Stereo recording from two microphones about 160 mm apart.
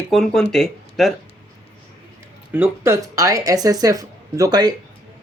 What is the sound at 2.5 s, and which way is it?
Speech, 15° right (ahead or behind).